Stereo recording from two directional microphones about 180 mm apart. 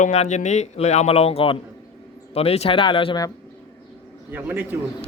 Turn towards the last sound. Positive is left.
turn(degrees=-10)  # may be behind; listen again after turning